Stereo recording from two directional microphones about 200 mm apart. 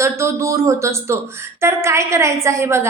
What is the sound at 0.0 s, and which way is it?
A woman's voice, 15° right (ahead or behind).